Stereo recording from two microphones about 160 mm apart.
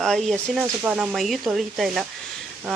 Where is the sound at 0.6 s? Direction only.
10° right (ahead or behind).